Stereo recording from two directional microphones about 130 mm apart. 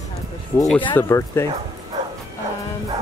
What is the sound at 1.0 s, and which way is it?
Speech, 20° left (ahead or behind).